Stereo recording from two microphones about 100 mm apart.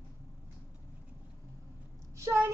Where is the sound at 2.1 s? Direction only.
30° right (ahead or behind).